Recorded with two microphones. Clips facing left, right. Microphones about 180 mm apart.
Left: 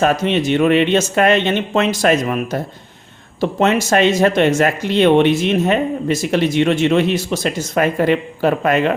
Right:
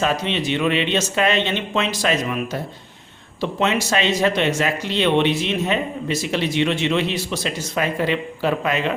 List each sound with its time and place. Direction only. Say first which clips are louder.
0.0 s speech: left 6 dB; 50° left (ahead or behind)